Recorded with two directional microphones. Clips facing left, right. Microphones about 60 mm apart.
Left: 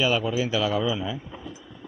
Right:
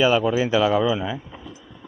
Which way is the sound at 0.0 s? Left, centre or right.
Right.